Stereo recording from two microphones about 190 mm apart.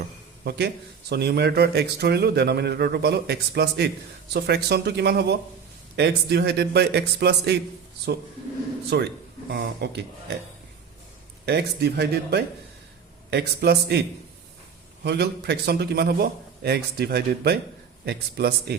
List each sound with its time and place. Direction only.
0.4 s speech: 60° right (ahead or behind)
8.9 s speech: 60° right (ahead or behind)
11.4 s speech: 60° right (ahead or behind)
15.0 s speech: 60° right (ahead or behind)